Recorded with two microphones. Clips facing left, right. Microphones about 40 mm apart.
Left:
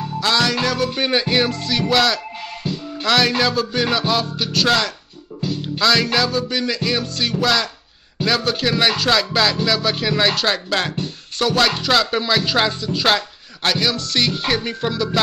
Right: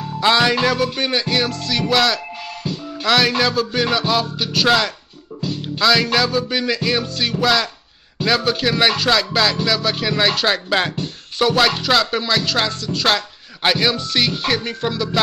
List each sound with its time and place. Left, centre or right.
0.2 s music: centre
0.9 s music: centre
13.6 s music: centre